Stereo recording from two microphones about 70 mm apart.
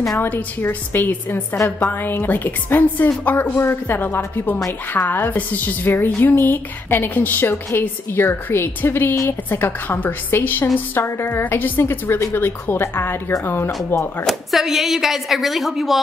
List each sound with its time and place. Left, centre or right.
0.2 s a woman's voice: left
14.2 s a woman's voice: centre